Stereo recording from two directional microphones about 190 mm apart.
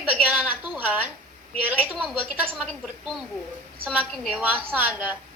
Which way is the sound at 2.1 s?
10° right (ahead or behind).